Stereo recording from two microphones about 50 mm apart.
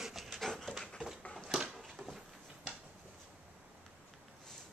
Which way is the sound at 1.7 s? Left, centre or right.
Centre.